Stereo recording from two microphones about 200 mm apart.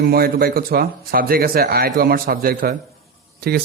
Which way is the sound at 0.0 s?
50° right (ahead or behind).